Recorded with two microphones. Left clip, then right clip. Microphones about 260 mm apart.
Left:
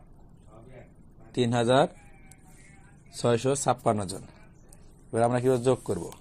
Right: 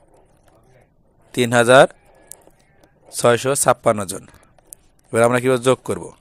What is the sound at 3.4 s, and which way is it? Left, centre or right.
Speech, right.